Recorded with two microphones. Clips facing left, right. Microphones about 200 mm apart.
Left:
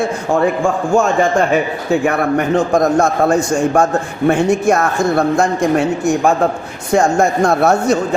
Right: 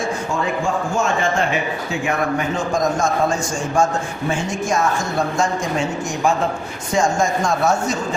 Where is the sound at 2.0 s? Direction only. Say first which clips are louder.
Left 2 dB; 65° left (ahead or behind).